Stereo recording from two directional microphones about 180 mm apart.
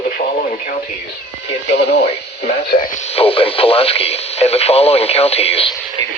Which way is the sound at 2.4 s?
55° left (ahead or behind).